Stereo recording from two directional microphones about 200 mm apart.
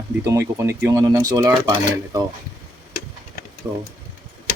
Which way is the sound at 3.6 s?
15° right (ahead or behind).